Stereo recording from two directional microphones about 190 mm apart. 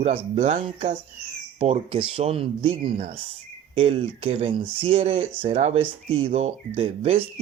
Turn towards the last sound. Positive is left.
turn(degrees=-30)  # may be behind; listen again after turning